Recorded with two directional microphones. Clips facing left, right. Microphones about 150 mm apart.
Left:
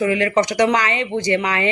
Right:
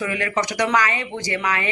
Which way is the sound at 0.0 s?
30° left (ahead or behind).